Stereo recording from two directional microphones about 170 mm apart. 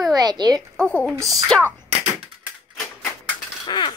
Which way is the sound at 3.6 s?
25° left (ahead or behind).